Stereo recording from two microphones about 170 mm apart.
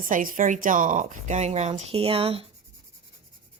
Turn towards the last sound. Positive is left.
turn(degrees=-35)  # may be behind; listen again after turning